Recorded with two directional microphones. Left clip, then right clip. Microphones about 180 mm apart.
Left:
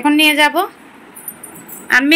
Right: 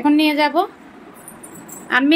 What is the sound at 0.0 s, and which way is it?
Speech, centre (ahead or behind).